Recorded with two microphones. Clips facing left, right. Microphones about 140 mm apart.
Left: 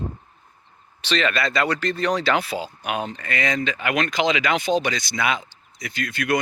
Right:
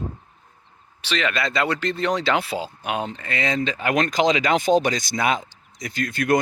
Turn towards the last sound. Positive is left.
turn(degrees=-45)  # may be behind; listen again after turning